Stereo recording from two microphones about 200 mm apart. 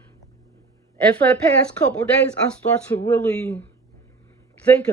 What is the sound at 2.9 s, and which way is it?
Speech, 10° left (ahead or behind).